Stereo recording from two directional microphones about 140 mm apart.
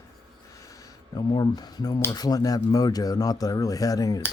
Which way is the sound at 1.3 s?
30° left (ahead or behind).